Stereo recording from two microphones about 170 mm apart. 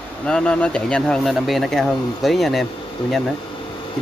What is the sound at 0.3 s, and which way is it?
Speech, 5° left (ahead or behind).